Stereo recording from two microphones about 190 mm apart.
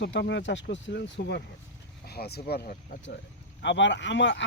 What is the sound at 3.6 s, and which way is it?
Speech, 70° left (ahead or behind).